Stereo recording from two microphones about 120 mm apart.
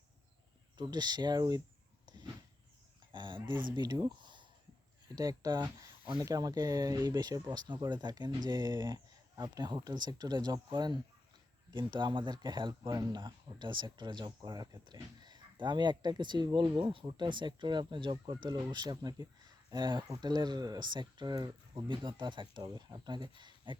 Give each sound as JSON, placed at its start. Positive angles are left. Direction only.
{"t": 0.8, "sound": "speech", "side_deg": -35}
{"t": 2.0, "sound": "a sound", "side_deg": -40}
{"t": 3.1, "sound": "speech", "side_deg": -40}